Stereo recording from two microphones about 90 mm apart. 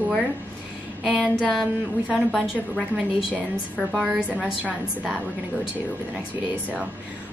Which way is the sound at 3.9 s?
5° right (ahead or behind).